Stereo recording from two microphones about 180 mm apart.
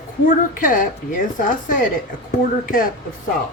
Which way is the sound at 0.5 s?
50° left (ahead or behind).